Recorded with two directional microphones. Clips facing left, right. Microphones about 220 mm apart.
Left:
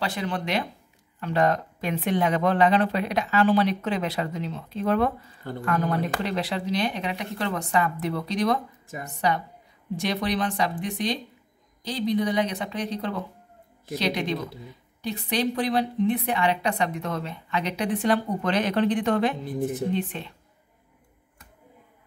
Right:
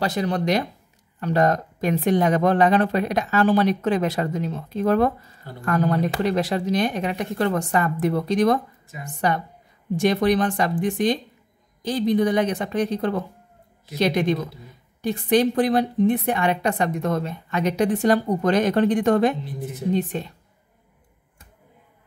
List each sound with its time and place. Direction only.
0.0 s a woman's voice: 40° right (ahead or behind)
6.2 s a woman's voice: 45° right (ahead or behind)
19.4 s a woman's voice: 50° left (ahead or behind)
19.9 s speech: 40° right (ahead or behind)